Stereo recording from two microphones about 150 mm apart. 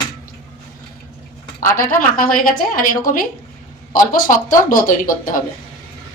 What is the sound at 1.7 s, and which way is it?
Speech, 70° left (ahead or behind).